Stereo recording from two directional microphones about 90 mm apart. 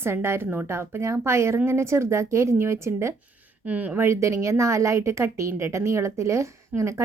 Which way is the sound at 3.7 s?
15° right (ahead or behind).